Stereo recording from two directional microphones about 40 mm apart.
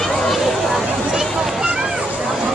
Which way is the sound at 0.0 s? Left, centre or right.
Centre.